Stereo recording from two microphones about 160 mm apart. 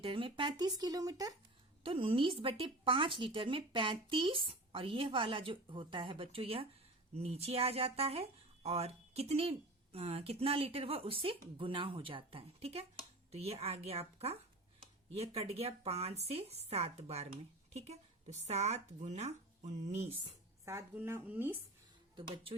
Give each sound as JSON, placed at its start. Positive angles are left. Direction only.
{"t": 0.0, "sound": "speech", "side_deg": -35}
{"t": 1.8, "sound": "speech", "side_deg": -35}
{"t": 20.7, "sound": "speech", "side_deg": -15}
{"t": 22.1, "sound": "speech", "side_deg": -30}